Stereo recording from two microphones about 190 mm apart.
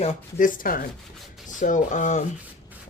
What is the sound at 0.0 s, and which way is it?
A man's voice, 40° left (ahead or behind).